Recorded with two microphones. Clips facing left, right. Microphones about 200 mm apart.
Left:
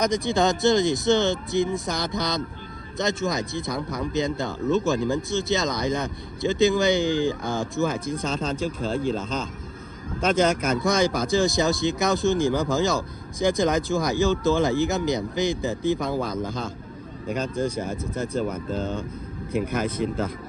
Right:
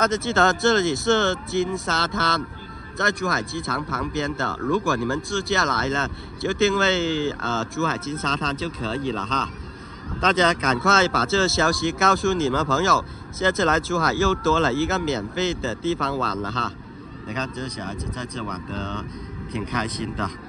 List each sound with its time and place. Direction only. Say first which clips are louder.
0.0 s speech: right 1 dB; 15° left (ahead or behind)
19.5 s speech: left 3 dB; 50° left (ahead or behind)